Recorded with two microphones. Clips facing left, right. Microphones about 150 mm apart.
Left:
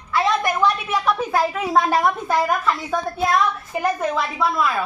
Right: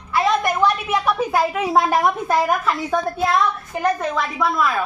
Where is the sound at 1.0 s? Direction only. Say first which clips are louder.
Even; 5° right (ahead or behind).